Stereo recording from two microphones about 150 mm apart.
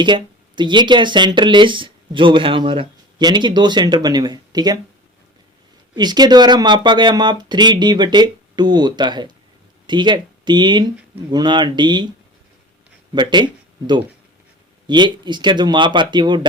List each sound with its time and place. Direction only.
0.0 s speech: 30° right (ahead or behind)
6.0 s speech: 25° right (ahead or behind)
13.1 s speech: 30° right (ahead or behind)